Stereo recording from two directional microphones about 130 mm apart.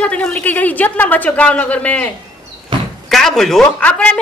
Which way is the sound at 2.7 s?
35° right (ahead or behind).